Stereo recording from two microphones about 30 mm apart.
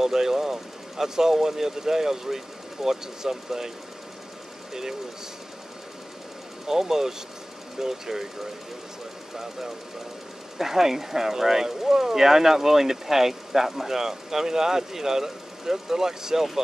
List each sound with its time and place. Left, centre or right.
0.0 s speech: centre
6.7 s speech: centre
10.6 s speech: centre